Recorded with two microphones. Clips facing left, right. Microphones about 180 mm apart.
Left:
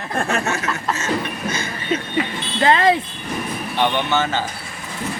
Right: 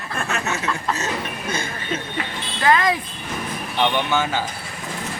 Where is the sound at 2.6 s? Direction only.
25° left (ahead or behind).